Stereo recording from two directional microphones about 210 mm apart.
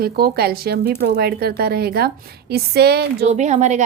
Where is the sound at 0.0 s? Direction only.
50° right (ahead or behind).